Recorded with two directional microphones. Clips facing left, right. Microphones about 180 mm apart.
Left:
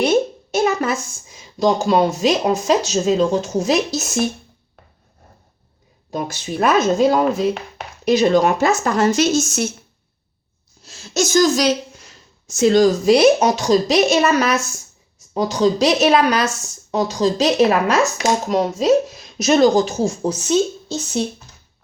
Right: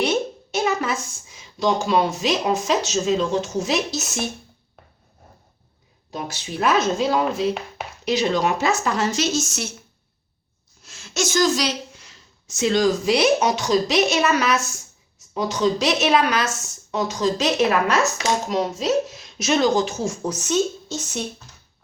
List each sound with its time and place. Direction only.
0.0 s speech: 45° left (ahead or behind)
6.1 s speech: 50° left (ahead or behind)
10.8 s a woman's voice: 35° left (ahead or behind)